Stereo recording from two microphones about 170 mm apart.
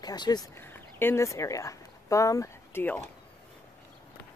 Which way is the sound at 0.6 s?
15° left (ahead or behind).